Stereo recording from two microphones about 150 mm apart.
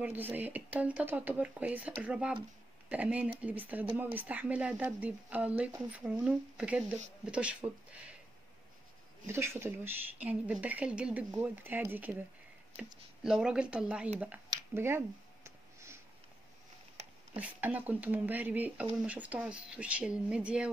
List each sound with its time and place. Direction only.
0.0 s speech: 10° right (ahead or behind)
9.3 s speech: 15° right (ahead or behind)
14.2 s a sound: 15° right (ahead or behind)
17.4 s speech: 10° right (ahead or behind)